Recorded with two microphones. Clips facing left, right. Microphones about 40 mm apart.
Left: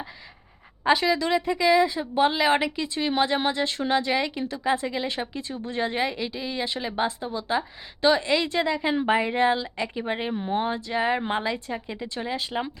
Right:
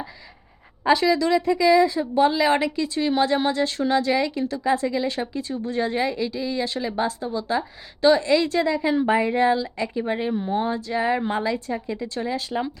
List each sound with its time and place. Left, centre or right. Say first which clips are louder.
0.9 s a woman's voice: right 3 dB; centre